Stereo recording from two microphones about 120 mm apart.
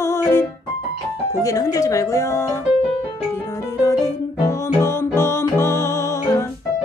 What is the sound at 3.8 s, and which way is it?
Music, 25° left (ahead or behind).